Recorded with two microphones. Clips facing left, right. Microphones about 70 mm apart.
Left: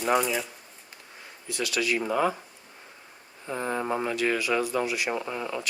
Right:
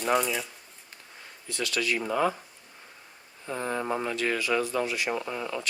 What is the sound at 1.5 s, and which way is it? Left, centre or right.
Speech, centre.